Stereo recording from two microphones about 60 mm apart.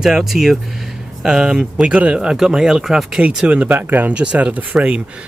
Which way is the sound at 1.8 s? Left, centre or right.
Right.